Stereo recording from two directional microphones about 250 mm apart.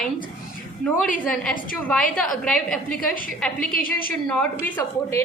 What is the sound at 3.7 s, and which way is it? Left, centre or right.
Speech, left.